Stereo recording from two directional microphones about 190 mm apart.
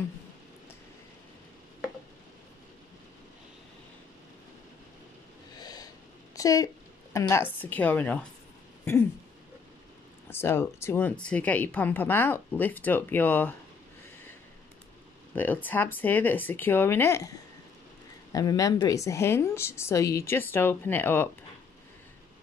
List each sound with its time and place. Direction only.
5.6 s snort: 20° left (ahead or behind)
6.3 s speech: 20° left (ahead or behind)
10.3 s speech: 15° left (ahead or behind)
15.3 s speech: 10° left (ahead or behind)
18.3 s speech: 20° left (ahead or behind)